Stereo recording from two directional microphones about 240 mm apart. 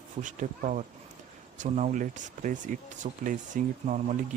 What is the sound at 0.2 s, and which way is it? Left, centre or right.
Speech, right.